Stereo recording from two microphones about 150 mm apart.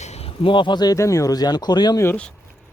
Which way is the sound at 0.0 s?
45° left (ahead or behind).